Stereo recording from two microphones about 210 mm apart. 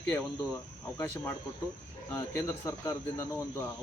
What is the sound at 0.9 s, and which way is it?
Speech, 10° left (ahead or behind).